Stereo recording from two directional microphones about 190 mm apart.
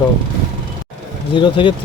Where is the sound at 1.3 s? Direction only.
25° left (ahead or behind).